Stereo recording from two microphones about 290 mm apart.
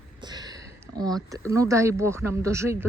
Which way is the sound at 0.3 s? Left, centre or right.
Centre.